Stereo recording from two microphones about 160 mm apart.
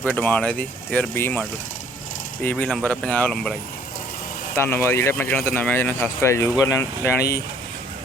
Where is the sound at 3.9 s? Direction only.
60° left (ahead or behind).